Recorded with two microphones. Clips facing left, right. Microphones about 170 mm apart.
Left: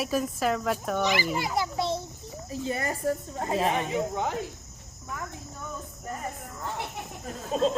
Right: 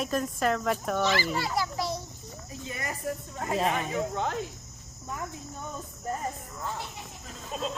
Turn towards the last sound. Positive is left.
turn(degrees=60)  # may be behind; listen again after turning